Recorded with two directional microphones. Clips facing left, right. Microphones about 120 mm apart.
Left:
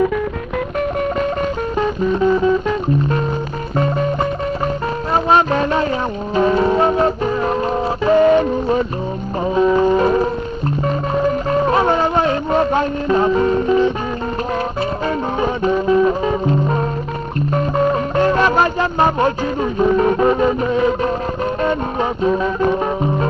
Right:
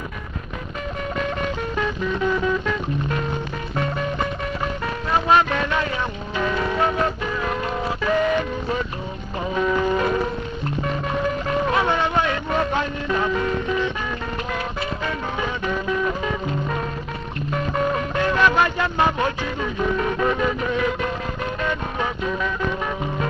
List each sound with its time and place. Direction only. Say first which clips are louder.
1.8 s music: left 8 dB; 35° left (ahead or behind)
3.7 s music: left 7 dB; 35° left (ahead or behind)
11.6 s music: left 5 dB; 35° left (ahead or behind)
15.0 s music: left 8 dB; 35° left (ahead or behind)
22.2 s music: left 12 dB; 35° left (ahead or behind)